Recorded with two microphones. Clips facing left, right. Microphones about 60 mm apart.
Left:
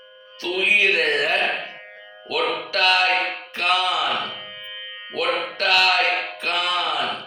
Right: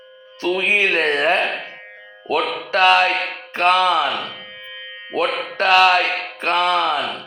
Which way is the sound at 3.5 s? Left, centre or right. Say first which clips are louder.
Right 7 dB; right.